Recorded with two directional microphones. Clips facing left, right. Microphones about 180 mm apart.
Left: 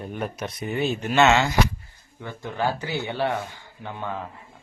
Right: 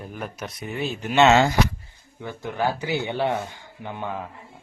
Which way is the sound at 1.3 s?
40° right (ahead or behind).